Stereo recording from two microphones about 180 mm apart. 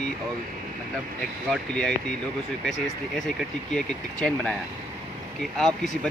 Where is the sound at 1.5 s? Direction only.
5° left (ahead or behind).